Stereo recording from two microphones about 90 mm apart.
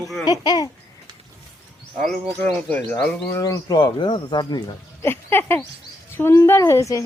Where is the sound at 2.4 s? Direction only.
15° left (ahead or behind).